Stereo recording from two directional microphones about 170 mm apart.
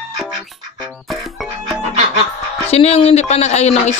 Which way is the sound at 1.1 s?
Centre (ahead or behind).